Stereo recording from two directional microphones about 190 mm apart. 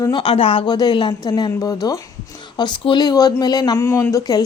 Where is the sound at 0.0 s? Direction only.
25° left (ahead or behind).